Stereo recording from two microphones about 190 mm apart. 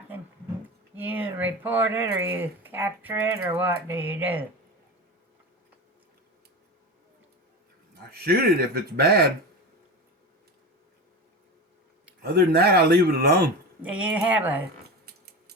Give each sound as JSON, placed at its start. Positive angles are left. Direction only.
{"t": 0.9, "sound": "speech", "side_deg": -10}
{"t": 8.1, "sound": "speech", "side_deg": -55}
{"t": 12.2, "sound": "speech", "side_deg": -55}
{"t": 13.8, "sound": "speech", "side_deg": -5}
{"t": 15.0, "sound": "a sound", "side_deg": -55}